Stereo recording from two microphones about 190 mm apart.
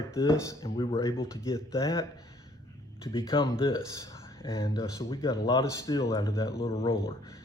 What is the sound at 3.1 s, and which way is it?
Speech, 25° left (ahead or behind).